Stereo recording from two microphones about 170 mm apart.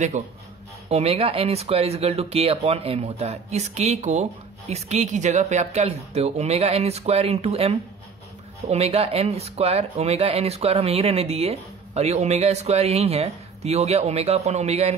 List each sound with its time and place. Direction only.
0.8 s speech: 35° right (ahead or behind)